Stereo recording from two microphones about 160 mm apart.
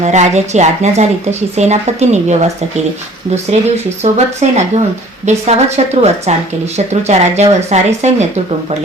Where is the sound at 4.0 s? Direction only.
45° right (ahead or behind).